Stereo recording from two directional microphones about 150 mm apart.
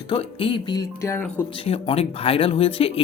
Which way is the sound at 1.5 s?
35° left (ahead or behind).